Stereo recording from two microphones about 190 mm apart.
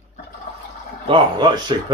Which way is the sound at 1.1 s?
25° right (ahead or behind).